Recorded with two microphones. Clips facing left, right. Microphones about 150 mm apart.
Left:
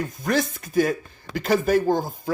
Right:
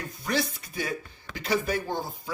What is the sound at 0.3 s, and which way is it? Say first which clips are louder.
Speech: left 5 dB; 45° left (ahead or behind).